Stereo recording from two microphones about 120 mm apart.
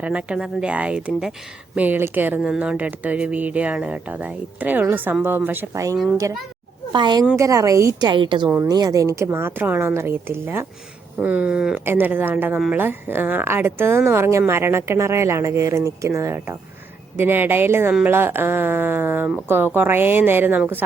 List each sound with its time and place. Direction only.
0.0 s speech: 10° right (ahead or behind)
2.4 s speech: 5° right (ahead or behind); by 6.0 s 25° right (ahead or behind)
6.9 s a woman's voice: 40° right (ahead or behind)
7.3 s speech: 25° right (ahead or behind)
8.1 s a woman's voice: 40° right (ahead or behind); by 20.6 s 15° right (ahead or behind)